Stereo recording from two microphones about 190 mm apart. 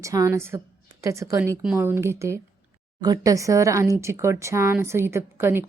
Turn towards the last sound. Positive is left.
turn(degrees=-10)  # may be behind; listen again after turning